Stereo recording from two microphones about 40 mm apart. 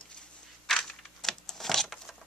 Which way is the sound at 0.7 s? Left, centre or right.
Centre.